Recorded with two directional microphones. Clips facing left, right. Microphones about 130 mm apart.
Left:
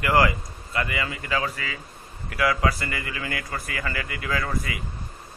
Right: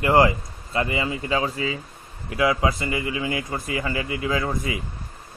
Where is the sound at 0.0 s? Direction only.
25° right (ahead or behind).